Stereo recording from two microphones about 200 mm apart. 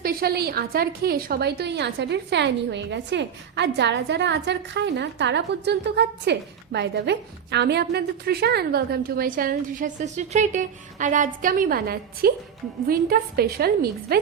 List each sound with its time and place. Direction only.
0.0 s a woman's voice: 50° right (ahead or behind)